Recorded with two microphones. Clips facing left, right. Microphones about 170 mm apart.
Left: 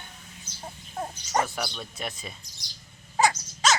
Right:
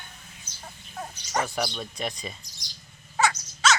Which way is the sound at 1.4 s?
Centre (ahead or behind).